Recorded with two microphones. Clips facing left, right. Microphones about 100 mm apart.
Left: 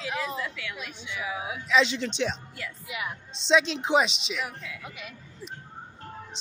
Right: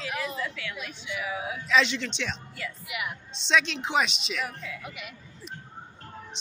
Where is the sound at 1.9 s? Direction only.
40° left (ahead or behind).